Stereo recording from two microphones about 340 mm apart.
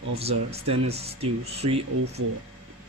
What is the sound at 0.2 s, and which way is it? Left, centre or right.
Speech, centre.